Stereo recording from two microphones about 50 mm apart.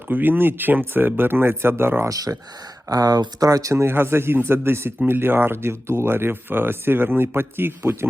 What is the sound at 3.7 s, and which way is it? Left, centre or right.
Speech, right.